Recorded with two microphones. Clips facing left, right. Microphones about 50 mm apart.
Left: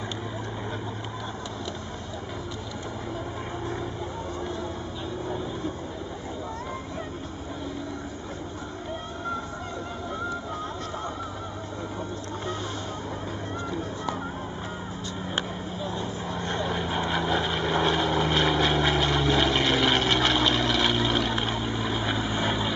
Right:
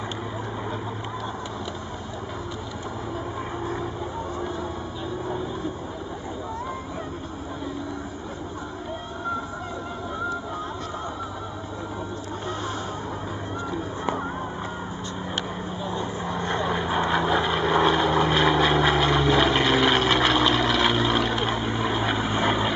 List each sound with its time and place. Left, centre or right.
15.8 s vehicle: centre